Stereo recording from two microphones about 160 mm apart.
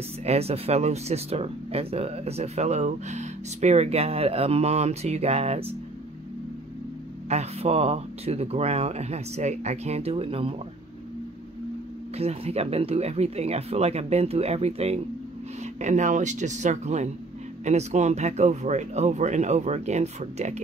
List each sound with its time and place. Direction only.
0.2 s speech: 40° right (ahead or behind)
7.2 s speech: 40° right (ahead or behind)
12.2 s speech: 40° right (ahead or behind)